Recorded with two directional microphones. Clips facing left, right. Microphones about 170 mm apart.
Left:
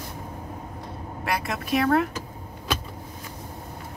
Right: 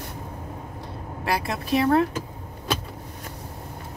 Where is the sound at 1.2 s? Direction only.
30° right (ahead or behind).